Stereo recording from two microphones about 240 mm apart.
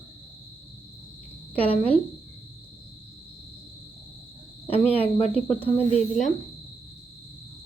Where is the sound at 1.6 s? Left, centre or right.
Centre.